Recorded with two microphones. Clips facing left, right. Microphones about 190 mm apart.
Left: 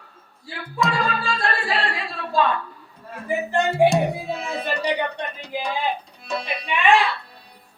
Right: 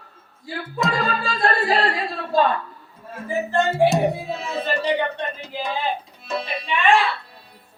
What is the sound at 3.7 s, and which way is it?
Music, centre (ahead or behind).